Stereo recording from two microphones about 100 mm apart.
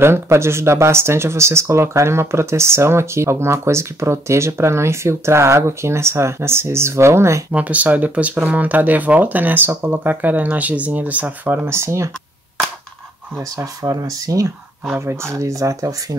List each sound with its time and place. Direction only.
0.0 s speech: 25° right (ahead or behind)
7.5 s speech: 15° right (ahead or behind)
13.6 s speech: 35° right (ahead or behind)